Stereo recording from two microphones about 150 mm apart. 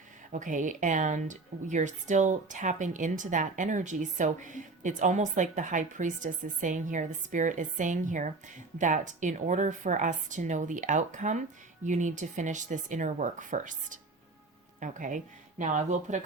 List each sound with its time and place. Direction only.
0.3 s speech: 60° right (ahead or behind)